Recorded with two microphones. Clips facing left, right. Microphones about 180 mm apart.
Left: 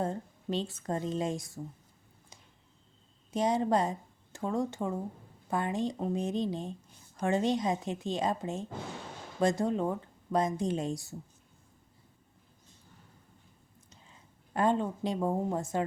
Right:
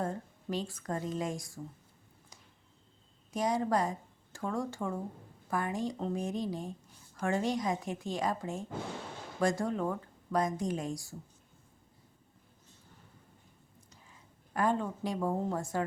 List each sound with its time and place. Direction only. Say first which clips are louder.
0.0 s speech: left 2 dB; 25° left (ahead or behind)
3.3 s speech: left 3 dB; 25° left (ahead or behind)
13.9 s speech: left 2 dB; 25° left (ahead or behind)